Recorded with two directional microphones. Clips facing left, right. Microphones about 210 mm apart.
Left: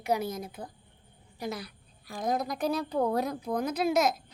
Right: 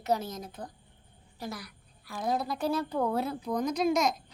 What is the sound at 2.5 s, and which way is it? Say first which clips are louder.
A woman's voice: even; 15° left (ahead or behind).